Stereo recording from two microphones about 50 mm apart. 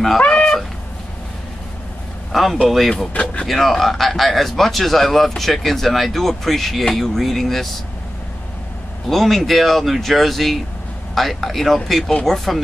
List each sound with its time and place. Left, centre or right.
0.2 s a sound: left
2.3 s a man's voice: centre
3.1 s speech: left
3.4 s a man's voice: centre
9.1 s a man's voice: centre